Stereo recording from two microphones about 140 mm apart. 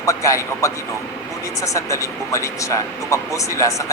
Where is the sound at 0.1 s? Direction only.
20° left (ahead or behind).